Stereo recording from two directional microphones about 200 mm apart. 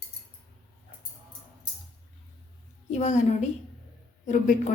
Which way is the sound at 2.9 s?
35° left (ahead or behind).